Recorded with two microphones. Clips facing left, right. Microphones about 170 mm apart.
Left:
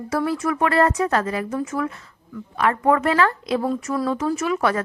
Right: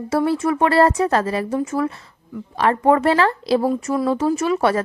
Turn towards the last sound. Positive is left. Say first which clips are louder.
# right 3 dB
turn(degrees=-30)  # may be behind; listen again after turning